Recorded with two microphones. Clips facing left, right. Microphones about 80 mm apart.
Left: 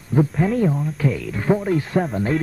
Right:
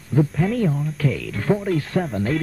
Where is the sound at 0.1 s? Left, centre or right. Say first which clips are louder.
Left 1 dB; left.